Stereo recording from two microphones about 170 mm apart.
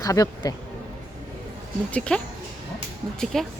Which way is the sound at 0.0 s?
20° left (ahead or behind).